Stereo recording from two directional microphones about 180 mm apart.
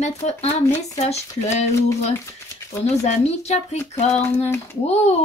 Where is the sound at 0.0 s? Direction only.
35° left (ahead or behind).